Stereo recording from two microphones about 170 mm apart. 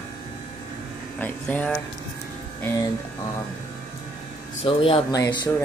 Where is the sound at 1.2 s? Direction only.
10° left (ahead or behind).